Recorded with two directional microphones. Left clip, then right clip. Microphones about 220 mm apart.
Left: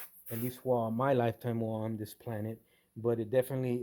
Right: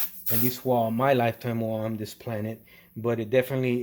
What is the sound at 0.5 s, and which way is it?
Speech, 30° left (ahead or behind).